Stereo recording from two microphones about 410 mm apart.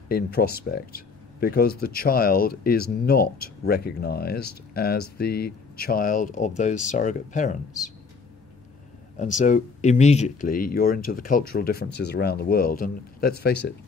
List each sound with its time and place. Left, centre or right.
0.1 s speech: left
9.1 s speech: centre